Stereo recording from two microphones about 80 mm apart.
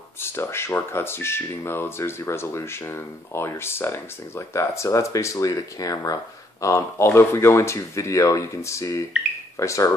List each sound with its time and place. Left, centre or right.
0.2 s speech: left